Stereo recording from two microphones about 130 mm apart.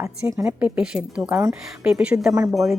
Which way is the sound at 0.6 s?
5° right (ahead or behind).